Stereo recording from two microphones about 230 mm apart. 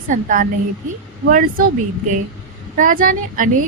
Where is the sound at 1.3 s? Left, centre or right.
Right.